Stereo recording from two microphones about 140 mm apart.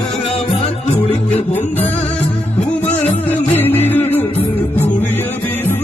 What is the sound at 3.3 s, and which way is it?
Music, 15° left (ahead or behind).